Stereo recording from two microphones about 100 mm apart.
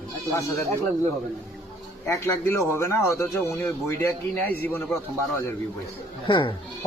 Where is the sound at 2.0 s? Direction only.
25° left (ahead or behind).